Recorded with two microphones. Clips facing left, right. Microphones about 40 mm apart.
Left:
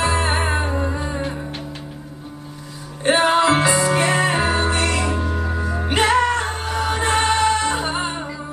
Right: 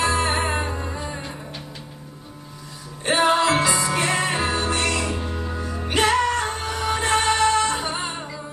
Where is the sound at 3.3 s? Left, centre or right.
Left.